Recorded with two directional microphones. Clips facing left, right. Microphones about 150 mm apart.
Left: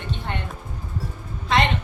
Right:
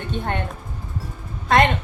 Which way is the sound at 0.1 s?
50° right (ahead or behind).